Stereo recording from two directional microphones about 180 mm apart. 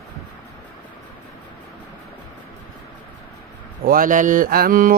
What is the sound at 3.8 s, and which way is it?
Speech, 50° right (ahead or behind).